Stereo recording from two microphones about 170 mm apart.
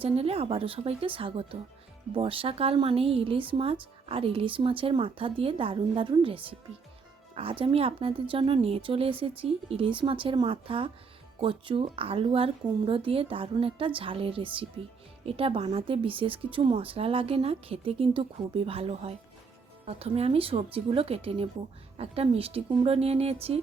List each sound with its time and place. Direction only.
0.0 s speech: 35° right (ahead or behind)